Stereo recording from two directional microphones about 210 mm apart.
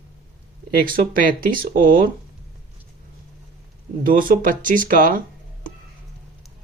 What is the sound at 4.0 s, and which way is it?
Speech, 40° right (ahead or behind).